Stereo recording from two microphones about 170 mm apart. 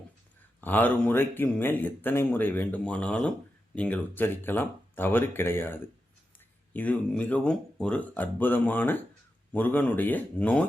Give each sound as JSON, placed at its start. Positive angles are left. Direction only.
{"t": 0.6, "sound": "speech", "side_deg": 10}